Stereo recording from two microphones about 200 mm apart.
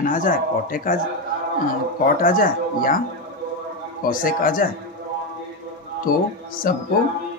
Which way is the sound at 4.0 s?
45° left (ahead or behind).